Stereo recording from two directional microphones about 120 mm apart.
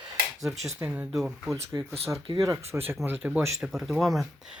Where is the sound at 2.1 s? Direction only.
45° right (ahead or behind).